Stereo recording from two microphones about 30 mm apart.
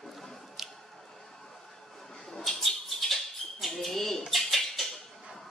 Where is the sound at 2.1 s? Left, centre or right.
Centre.